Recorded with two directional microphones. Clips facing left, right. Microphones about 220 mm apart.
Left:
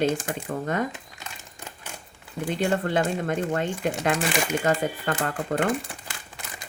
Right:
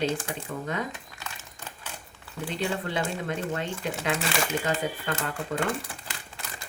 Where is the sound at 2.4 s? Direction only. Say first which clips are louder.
Left 5 dB; 50° left (ahead or behind).